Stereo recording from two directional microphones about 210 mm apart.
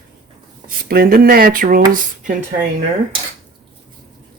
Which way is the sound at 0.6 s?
45° right (ahead or behind).